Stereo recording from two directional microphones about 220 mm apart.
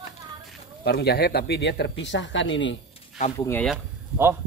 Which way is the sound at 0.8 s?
50° left (ahead or behind).